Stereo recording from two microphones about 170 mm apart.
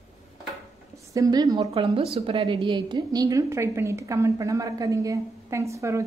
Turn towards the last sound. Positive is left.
turn(degrees=-15)  # may be behind; listen again after turning